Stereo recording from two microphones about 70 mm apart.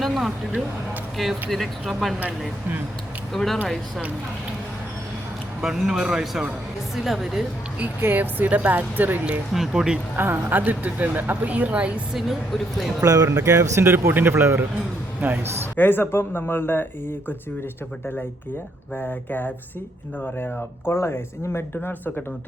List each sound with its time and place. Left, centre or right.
0.0 s speech: centre
3.3 s speech: centre
5.6 s speech: centre
8.0 s speech: right
9.5 s speech: centre
10.2 s speech: right
12.1 s speech: centre
13.0 s speech: right
14.1 s a man's voice: right
15.7 s speech: left